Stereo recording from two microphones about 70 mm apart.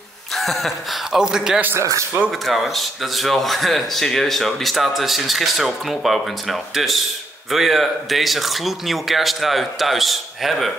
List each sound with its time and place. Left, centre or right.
0.3 s a man's voice: centre
1.8 s speech: right
2.4 s speech: centre